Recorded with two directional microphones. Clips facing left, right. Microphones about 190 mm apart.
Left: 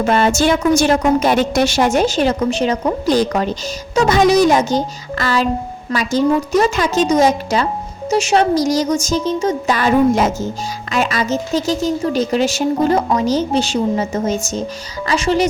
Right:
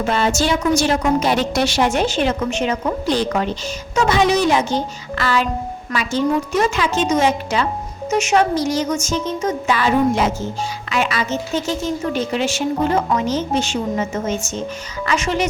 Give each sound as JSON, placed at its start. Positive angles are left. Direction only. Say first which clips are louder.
{"t": 0.0, "sound": "a woman's voice", "louder": "left 4 dB", "side_deg": 50}